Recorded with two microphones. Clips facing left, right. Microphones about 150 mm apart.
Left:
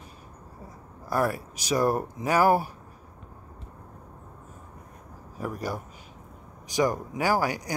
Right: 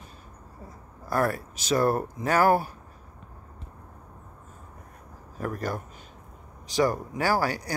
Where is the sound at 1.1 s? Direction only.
10° left (ahead or behind).